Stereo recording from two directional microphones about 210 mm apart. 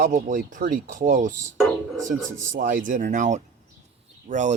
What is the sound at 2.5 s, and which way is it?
Speech, 40° right (ahead or behind).